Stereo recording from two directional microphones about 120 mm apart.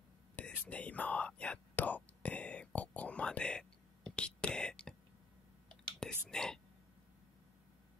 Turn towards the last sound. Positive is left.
turn(degrees=5)  # may be behind; listen again after turning